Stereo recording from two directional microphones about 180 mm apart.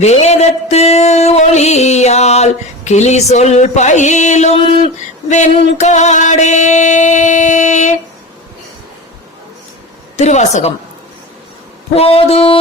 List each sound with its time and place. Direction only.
0.0 s music: 40° left (ahead or behind)
10.2 s music: 40° left (ahead or behind)
11.9 s music: 35° left (ahead or behind)